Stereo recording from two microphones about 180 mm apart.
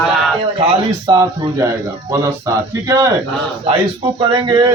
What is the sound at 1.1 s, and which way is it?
A man's voice, 20° right (ahead or behind).